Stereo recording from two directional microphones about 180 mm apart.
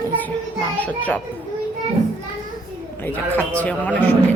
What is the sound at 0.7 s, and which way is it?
Speech, 10° left (ahead or behind).